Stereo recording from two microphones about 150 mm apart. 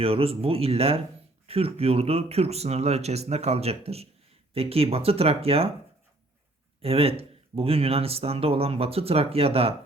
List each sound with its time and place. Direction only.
0.0 s speech: 40° right (ahead or behind)
6.8 s speech: 40° right (ahead or behind)